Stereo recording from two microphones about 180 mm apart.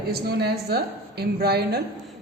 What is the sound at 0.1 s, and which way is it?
A woman's voice, 60° right (ahead or behind).